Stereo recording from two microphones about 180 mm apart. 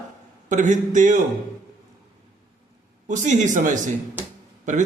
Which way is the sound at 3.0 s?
45° right (ahead or behind).